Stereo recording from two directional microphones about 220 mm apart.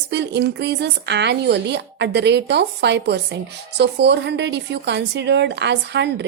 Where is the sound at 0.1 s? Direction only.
50° right (ahead or behind).